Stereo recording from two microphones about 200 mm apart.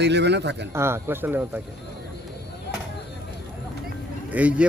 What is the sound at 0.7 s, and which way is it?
Speech, 10° right (ahead or behind).